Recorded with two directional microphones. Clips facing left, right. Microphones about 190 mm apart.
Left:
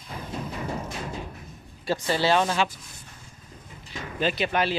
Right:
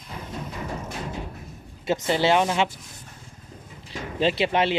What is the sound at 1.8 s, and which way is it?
Speech, 20° right (ahead or behind).